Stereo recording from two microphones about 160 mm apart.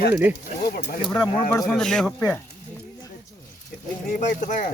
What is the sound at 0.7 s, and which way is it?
Speech, 70° left (ahead or behind).